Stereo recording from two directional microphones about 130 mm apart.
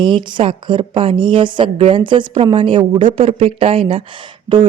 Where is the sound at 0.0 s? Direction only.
40° right (ahead or behind).